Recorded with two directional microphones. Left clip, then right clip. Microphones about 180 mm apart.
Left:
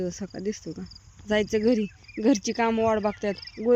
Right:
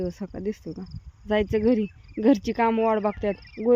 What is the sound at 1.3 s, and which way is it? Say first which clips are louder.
Speech: right 1 dB; 10° right (ahead or behind).